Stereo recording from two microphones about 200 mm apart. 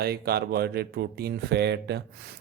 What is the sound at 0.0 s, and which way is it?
Speech, 50° right (ahead or behind).